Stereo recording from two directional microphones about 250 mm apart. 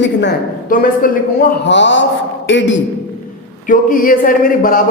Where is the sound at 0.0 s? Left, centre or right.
Left.